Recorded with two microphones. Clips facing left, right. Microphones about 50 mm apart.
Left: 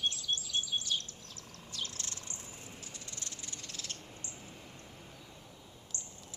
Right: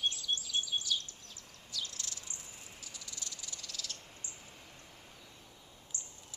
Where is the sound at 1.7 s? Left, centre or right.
Left.